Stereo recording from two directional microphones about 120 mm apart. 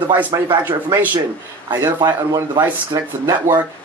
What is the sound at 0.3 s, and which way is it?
Speech, 30° right (ahead or behind).